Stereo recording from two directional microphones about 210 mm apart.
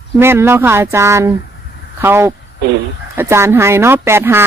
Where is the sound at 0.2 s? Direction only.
10° right (ahead or behind).